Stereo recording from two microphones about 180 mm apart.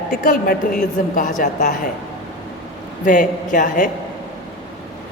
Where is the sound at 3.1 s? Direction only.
45° left (ahead or behind).